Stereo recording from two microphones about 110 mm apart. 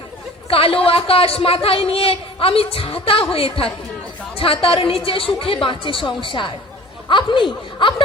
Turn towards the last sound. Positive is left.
turn(degrees=45)  # may be behind; listen again after turning